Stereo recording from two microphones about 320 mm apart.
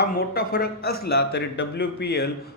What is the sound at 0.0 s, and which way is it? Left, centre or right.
Speech, left.